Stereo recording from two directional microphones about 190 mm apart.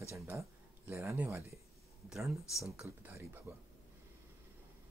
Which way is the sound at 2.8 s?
10° right (ahead or behind).